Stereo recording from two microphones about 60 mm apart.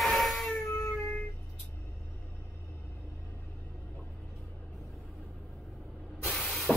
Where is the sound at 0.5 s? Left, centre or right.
Left.